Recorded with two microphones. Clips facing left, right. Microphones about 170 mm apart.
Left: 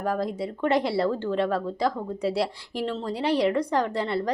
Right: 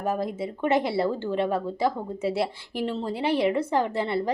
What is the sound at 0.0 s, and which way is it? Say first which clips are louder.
A woman's voice: even; 25° right (ahead or behind).